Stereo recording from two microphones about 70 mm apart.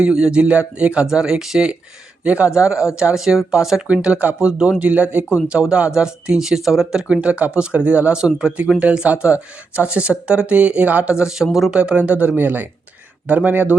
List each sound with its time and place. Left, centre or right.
0.0 s speech: centre